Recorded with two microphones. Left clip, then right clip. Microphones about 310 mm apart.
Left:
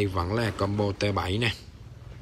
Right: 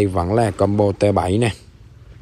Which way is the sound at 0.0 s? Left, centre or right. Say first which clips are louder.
Right 10 dB; centre.